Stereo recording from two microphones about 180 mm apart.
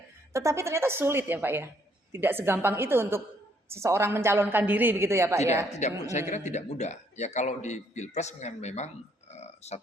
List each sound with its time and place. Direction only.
0.3 s a woman's voice: 15° right (ahead or behind)
5.7 s a man's voice: 40° left (ahead or behind)
9.3 s burping: 35° left (ahead or behind)